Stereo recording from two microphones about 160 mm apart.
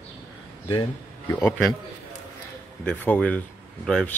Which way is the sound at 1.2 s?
15° left (ahead or behind).